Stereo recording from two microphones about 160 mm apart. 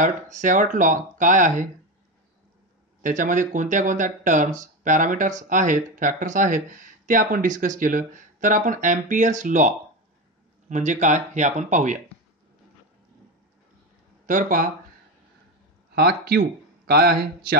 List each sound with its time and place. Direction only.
0.0 s speech: 50° right (ahead or behind)
3.0 s speech: 55° right (ahead or behind)
14.2 s speech: 60° right (ahead or behind)
15.9 s speech: 80° right